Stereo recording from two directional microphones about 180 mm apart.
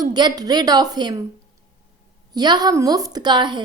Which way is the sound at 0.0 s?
25° right (ahead or behind).